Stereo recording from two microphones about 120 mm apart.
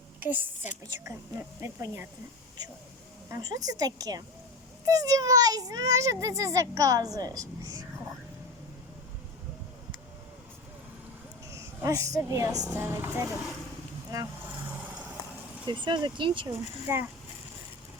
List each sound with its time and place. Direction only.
0.2 s a woman's voice: 15° right (ahead or behind)
3.2 s a woman's voice: 25° right (ahead or behind)
11.5 s a sound: 25° right (ahead or behind)
12.1 s a child's voice: 25° right (ahead or behind)
14.1 s a woman's voice: 30° right (ahead or behind)
15.6 s a woman's voice: 40° right (ahead or behind)
16.9 s speech: 20° right (ahead or behind)